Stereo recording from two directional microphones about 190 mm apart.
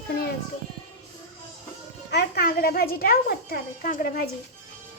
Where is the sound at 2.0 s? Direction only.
55° left (ahead or behind).